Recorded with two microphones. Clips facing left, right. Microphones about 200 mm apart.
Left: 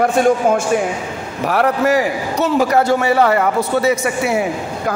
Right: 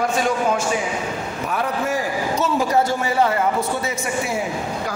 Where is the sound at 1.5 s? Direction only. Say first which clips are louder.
Left 9 dB; 75° left (ahead or behind).